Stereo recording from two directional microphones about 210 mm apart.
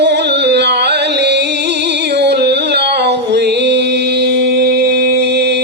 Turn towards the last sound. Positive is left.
turn(degrees=-55)  # may be behind; listen again after turning